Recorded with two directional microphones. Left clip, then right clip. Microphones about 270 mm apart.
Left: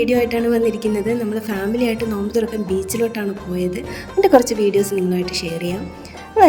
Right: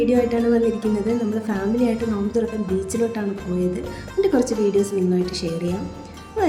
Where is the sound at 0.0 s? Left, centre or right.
Left.